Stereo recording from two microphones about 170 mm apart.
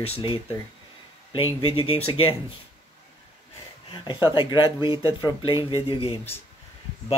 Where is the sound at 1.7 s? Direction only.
35° left (ahead or behind).